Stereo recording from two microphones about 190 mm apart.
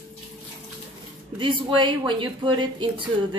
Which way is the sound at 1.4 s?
25° right (ahead or behind).